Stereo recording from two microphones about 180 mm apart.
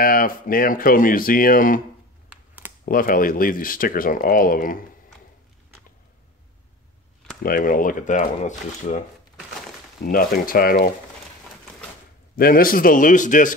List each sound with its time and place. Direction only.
0.0 s speech: 50° left (ahead or behind)
2.2 s a sound: 10° right (ahead or behind)
2.8 s speech: 50° left (ahead or behind)
7.4 s speech: 50° left (ahead or behind)
10.0 s speech: 50° left (ahead or behind)
12.4 s speech: 55° left (ahead or behind)